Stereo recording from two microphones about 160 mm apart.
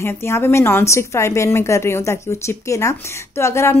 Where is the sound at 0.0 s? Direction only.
15° left (ahead or behind).